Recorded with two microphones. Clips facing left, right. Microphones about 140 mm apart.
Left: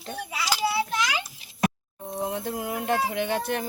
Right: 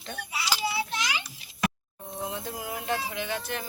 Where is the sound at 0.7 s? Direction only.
50° left (ahead or behind).